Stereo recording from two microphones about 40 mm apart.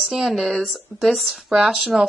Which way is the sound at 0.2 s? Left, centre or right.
Centre.